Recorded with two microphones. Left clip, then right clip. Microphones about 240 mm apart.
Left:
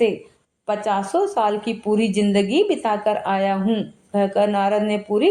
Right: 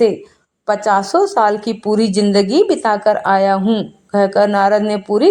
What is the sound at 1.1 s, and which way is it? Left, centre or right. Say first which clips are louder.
Speech: right 6 dB; right.